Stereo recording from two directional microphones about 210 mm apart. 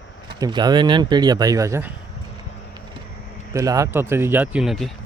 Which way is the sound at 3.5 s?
15° right (ahead or behind).